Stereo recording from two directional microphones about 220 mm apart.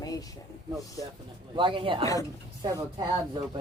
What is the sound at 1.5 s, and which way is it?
Speech, 20° right (ahead or behind).